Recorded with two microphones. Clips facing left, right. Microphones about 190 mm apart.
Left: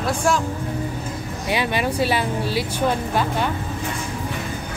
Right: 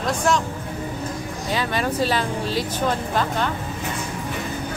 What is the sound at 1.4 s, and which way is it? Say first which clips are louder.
Speech: left 2 dB; 15° left (ahead or behind).